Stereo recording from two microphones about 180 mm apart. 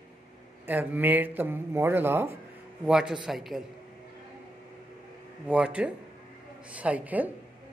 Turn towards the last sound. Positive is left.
turn(degrees=-10)  # may be behind; listen again after turning